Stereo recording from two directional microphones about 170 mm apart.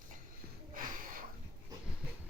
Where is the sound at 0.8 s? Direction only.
55° right (ahead or behind).